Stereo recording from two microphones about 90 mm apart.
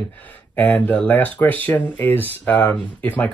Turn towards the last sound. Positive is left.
turn(degrees=20)  # may be behind; listen again after turning